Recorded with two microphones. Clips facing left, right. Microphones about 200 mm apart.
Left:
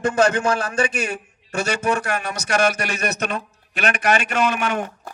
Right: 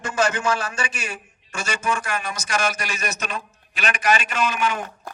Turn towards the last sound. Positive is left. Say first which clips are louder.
# left 3 dB
turn(degrees=60)  # may be behind; listen again after turning